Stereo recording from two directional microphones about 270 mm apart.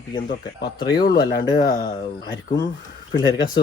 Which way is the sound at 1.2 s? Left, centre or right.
Centre.